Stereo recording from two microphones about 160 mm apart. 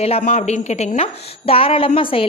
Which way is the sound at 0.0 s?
40° left (ahead or behind).